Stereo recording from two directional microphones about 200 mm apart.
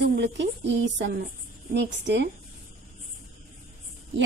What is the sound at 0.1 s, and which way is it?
A woman's voice, 60° right (ahead or behind).